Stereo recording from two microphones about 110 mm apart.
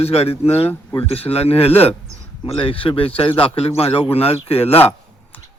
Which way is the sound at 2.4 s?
50° left (ahead or behind).